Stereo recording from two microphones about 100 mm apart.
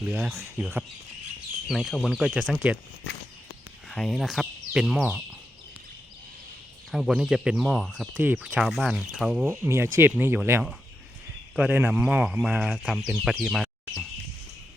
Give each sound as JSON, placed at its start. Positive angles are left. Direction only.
{"t": 0.0, "sound": "speech", "side_deg": -10}
{"t": 1.6, "sound": "speech", "side_deg": -5}
{"t": 3.8, "sound": "speech", "side_deg": 5}
{"t": 6.9, "sound": "speech", "side_deg": -5}
{"t": 9.5, "sound": "speech", "side_deg": -25}
{"t": 11.7, "sound": "speech", "side_deg": -20}